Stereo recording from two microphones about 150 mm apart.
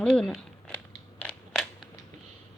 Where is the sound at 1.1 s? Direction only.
5° left (ahead or behind).